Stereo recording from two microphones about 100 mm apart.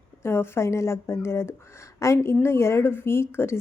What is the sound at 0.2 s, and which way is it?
A woman's voice, 25° left (ahead or behind).